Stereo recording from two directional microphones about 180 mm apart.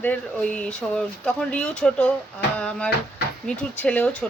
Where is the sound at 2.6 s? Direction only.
5° left (ahead or behind).